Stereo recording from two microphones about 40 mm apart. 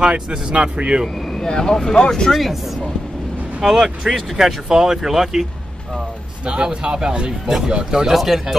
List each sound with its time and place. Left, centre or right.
0.0 s speech: right
1.3 s speech: centre
3.6 s speech: centre
6.4 s speech: right
8.1 s speech: centre